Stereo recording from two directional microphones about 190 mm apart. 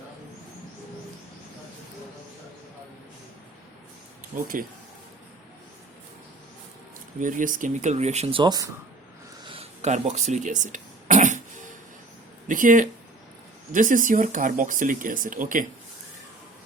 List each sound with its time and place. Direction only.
4.4 s speech: 45° right (ahead or behind)
7.2 s speech: 45° right (ahead or behind); by 8.7 s 20° right (ahead or behind)
9.4 s throat clearing: 30° right (ahead or behind)
12.5 s speech: 45° right (ahead or behind)